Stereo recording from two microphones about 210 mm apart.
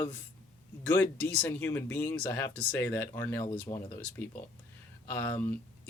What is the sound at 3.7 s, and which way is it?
Speech, 20° left (ahead or behind).